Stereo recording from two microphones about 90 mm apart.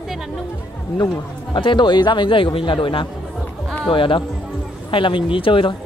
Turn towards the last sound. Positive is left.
turn(degrees=75)  # may be behind; listen again after turning